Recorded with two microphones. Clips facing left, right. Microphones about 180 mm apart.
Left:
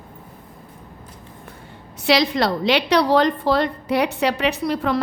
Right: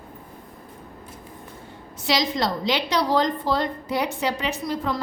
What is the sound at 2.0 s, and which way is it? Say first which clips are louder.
A woman's voice: left 5 dB; 65° left (ahead or behind).